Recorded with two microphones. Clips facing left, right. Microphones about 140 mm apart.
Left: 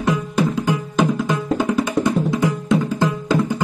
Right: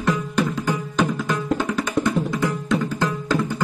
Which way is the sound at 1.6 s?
20° left (ahead or behind).